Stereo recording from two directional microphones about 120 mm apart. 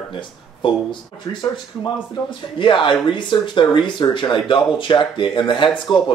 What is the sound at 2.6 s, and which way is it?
Speech, 40° left (ahead or behind).